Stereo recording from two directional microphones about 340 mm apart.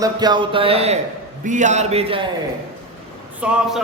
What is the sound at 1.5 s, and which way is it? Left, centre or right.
Speech, right.